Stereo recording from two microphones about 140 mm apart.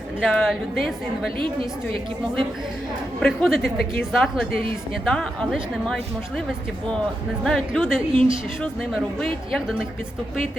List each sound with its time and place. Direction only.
0.2 s a woman's voice: centre (ahead or behind)
3.2 s a woman's voice: 5° left (ahead or behind)
7.4 s a woman's voice: centre (ahead or behind)
8.1 s a woman's voice: 40° right (ahead or behind)
8.6 s a woman's voice: centre (ahead or behind)